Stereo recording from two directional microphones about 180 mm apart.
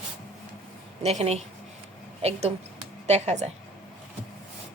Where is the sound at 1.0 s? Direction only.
35° right (ahead or behind).